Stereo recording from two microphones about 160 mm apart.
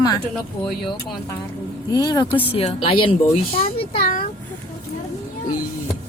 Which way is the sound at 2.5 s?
35° left (ahead or behind).